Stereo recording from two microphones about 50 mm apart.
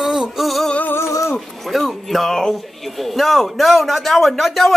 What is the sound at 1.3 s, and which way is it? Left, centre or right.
Speech, centre.